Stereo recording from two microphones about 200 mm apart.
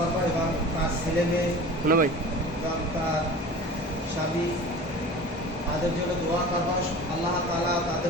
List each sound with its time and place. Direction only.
1.9 s speech: 45° right (ahead or behind)